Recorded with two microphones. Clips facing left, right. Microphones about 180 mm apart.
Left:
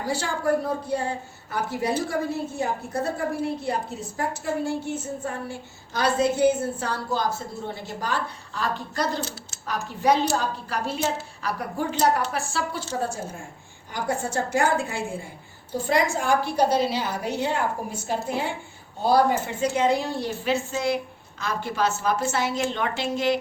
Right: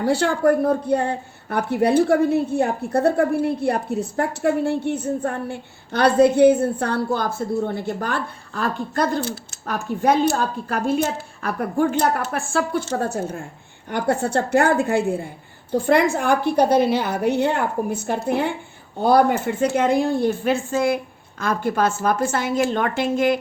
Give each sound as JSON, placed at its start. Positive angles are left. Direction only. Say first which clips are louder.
{"t": 0.0, "sound": "a woman's voice", "louder": "right 8 dB", "side_deg": -60}